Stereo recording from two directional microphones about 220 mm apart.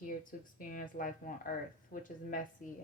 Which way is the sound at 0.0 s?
35° left (ahead or behind).